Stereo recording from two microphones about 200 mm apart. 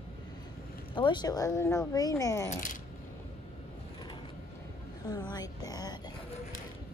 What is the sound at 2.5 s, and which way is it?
Speech, 40° left (ahead or behind).